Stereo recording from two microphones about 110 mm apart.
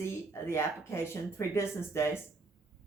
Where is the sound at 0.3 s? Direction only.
25° left (ahead or behind).